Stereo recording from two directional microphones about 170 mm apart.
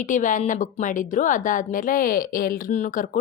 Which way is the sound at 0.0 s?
50° left (ahead or behind).